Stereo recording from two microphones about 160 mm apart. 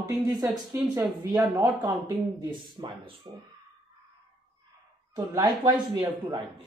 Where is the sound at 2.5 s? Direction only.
30° right (ahead or behind).